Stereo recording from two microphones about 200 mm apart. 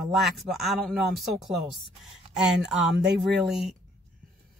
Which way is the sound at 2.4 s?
5° right (ahead or behind).